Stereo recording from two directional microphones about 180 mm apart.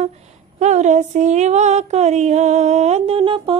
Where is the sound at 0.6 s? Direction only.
40° right (ahead or behind).